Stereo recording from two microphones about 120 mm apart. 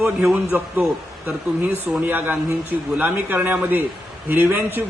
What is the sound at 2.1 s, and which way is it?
A man's voice, 15° right (ahead or behind).